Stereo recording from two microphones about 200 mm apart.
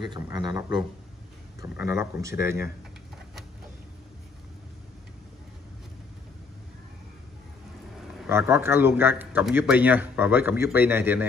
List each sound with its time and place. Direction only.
0.0 s a man's voice: 25° right (ahead or behind)
8.3 s a man's voice: 10° right (ahead or behind)